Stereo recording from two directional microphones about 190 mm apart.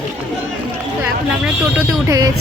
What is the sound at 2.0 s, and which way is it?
Speech, 20° right (ahead or behind).